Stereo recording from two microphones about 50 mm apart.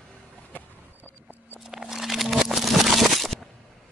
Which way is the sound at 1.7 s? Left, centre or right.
Centre.